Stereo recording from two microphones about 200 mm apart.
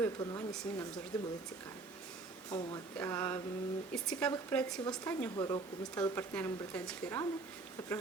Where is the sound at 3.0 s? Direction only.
10° left (ahead or behind).